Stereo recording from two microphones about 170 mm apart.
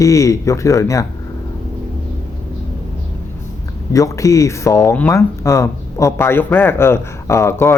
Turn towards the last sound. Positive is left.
turn(degrees=15)  # may be behind; listen again after turning